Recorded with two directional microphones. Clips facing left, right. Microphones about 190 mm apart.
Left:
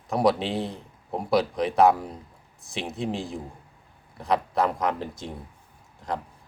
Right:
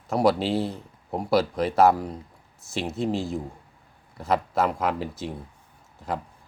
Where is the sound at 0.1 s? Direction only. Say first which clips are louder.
Right 1 dB; centre (ahead or behind).